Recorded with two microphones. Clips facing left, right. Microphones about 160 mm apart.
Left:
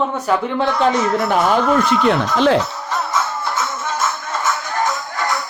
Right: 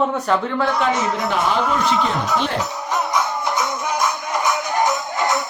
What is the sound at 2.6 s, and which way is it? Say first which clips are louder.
Music: right 1 dB; 15° right (ahead or behind).